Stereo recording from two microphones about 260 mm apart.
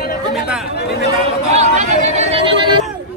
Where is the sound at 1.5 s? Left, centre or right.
Right.